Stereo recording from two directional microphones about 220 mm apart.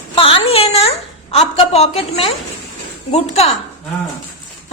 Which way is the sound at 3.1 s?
30° left (ahead or behind).